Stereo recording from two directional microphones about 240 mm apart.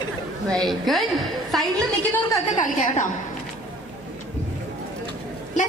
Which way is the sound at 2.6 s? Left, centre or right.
Left.